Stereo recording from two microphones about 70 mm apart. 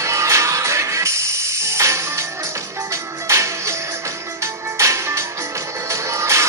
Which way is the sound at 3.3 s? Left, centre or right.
Right.